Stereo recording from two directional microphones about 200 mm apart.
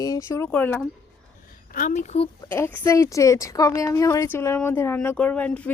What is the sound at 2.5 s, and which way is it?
Speech, 10° left (ahead or behind).